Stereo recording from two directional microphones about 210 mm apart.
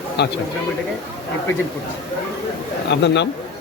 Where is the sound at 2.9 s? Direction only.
55° left (ahead or behind).